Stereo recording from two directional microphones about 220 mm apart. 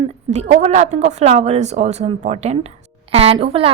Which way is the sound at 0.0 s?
30° right (ahead or behind).